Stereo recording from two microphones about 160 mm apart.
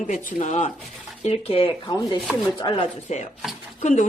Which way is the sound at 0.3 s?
50° left (ahead or behind).